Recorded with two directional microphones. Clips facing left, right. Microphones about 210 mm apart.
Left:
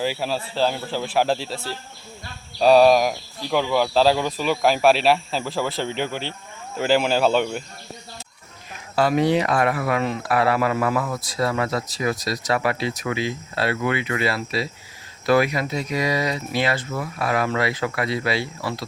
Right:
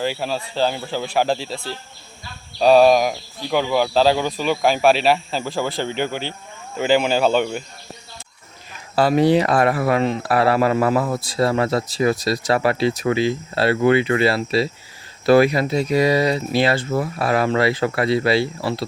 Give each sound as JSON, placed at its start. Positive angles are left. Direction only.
{"t": 0.0, "sound": "speech", "side_deg": 5}
{"t": 9.0, "sound": "speech", "side_deg": -35}